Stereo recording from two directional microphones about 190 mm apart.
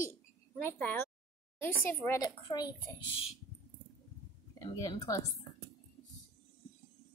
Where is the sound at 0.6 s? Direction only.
10° left (ahead or behind).